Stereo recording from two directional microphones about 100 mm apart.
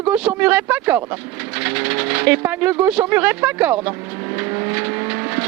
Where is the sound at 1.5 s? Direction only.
15° right (ahead or behind).